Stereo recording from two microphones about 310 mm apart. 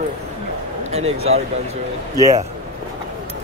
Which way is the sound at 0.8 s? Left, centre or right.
Centre.